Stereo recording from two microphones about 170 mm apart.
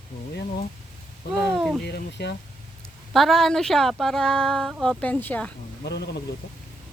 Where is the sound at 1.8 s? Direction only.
80° left.